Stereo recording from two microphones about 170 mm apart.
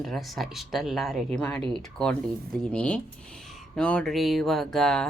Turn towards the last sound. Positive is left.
turn(degrees=5)  # may be behind; listen again after turning